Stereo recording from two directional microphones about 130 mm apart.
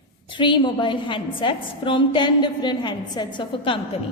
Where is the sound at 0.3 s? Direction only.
40° left (ahead or behind).